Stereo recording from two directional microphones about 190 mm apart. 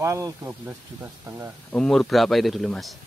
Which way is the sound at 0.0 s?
15° right (ahead or behind).